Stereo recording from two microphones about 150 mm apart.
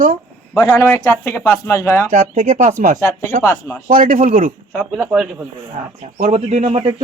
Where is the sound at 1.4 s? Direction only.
20° left (ahead or behind).